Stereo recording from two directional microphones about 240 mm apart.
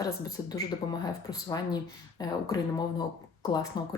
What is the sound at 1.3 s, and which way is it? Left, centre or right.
Speech, centre.